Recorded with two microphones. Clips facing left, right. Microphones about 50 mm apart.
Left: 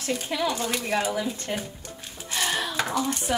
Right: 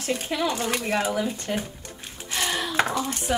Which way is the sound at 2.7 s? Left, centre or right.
Right.